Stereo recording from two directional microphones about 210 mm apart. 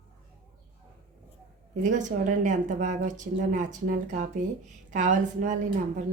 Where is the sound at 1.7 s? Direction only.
35° right (ahead or behind).